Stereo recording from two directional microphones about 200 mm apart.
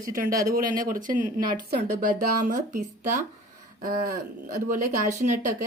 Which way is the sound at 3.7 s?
45° right (ahead or behind).